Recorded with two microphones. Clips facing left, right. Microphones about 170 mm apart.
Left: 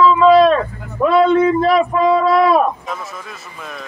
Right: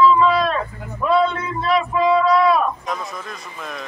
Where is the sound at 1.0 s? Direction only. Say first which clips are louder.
Left 4 dB; 90° left.